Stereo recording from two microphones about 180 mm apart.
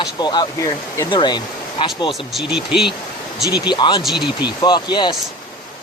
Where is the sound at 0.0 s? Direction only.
25° left (ahead or behind).